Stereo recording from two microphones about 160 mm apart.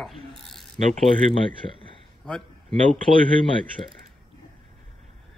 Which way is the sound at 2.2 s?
5° left (ahead or behind).